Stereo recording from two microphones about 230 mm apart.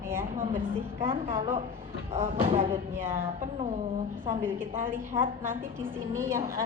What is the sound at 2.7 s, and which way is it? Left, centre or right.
Speech, centre.